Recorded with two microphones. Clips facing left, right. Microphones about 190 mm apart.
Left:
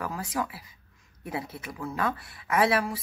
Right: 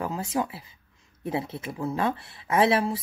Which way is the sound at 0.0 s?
25° right (ahead or behind).